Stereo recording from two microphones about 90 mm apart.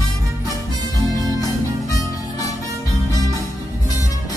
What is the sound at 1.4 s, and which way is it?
Music, 40° left (ahead or behind).